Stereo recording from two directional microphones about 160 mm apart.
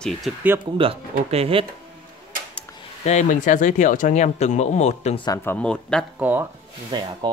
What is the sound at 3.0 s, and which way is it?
Speech, 50° left (ahead or behind).